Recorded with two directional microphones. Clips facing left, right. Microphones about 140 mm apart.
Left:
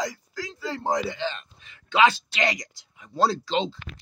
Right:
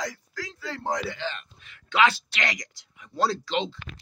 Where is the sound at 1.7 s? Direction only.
25° left (ahead or behind).